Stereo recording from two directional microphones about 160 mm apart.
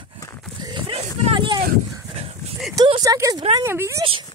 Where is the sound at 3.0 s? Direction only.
20° right (ahead or behind).